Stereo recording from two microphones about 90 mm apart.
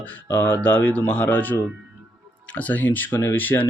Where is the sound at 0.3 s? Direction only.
15° left (ahead or behind).